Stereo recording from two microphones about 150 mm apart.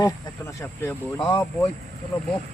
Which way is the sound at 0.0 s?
15° left (ahead or behind).